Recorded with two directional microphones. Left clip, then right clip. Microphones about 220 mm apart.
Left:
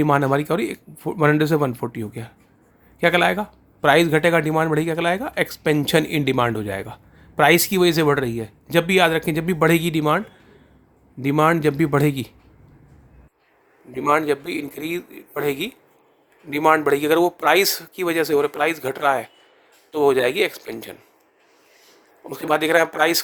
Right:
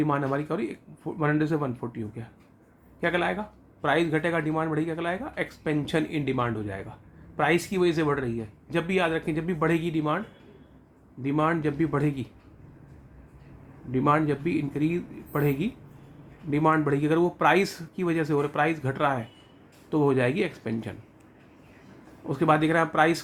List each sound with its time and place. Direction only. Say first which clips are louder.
0.0 s speech: left 8 dB; 45° left (ahead or behind)
14.0 s speech: left 5 dB; 45° left (ahead or behind)
22.3 s speech: left 4 dB; 50° left (ahead or behind)